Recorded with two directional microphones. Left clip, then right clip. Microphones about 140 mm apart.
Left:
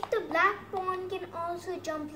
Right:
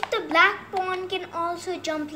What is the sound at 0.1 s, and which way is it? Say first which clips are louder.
A child's voice: right 7 dB; centre (ahead or behind).